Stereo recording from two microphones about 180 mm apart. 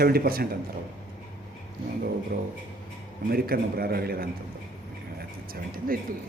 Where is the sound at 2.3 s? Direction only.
55° right (ahead or behind).